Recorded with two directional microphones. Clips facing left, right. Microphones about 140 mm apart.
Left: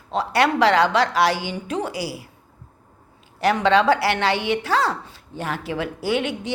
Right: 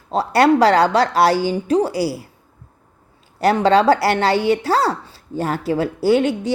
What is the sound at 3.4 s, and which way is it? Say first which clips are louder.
A woman's voice: right 4 dB; 40° right (ahead or behind).